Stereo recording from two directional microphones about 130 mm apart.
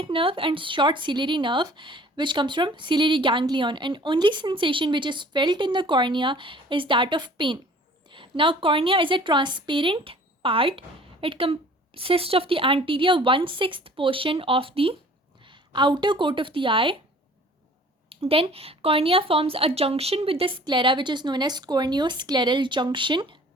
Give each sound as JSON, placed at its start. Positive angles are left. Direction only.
{"t": 0.0, "sound": "a woman's voice", "side_deg": -45}
{"t": 18.1, "sound": "speech", "side_deg": -45}